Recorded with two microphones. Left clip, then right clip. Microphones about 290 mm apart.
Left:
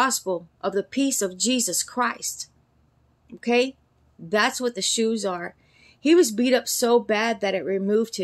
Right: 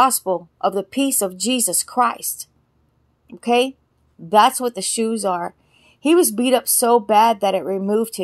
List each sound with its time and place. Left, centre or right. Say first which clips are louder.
0.0 s a woman's voice: right 7 dB; centre